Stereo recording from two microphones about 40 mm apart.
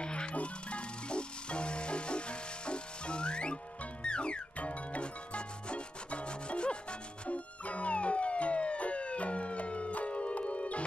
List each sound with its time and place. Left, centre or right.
0.0 s music: left